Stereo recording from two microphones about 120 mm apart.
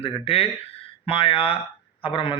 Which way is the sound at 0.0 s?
50° left (ahead or behind).